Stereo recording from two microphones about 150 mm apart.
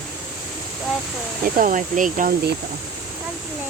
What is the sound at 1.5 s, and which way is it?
Speech, 65° right (ahead or behind).